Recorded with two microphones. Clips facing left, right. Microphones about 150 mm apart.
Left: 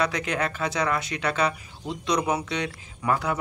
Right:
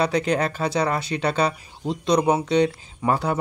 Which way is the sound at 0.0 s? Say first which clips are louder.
Right 5 dB; 30° right (ahead or behind).